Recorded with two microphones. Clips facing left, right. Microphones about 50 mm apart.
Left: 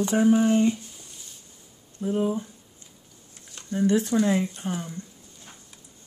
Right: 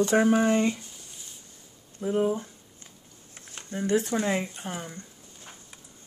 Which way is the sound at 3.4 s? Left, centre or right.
Right.